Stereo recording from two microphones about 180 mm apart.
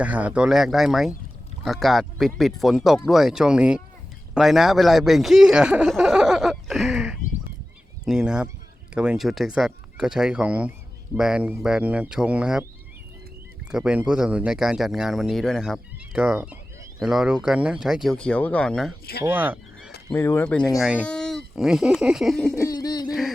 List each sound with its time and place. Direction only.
0.0 s speech: 10° right (ahead or behind)
13.7 s speech: 5° right (ahead or behind)
19.2 s speech: 10° right (ahead or behind)
20.1 s speech: 15° left (ahead or behind)
22.5 s a sound: 20° left (ahead or behind)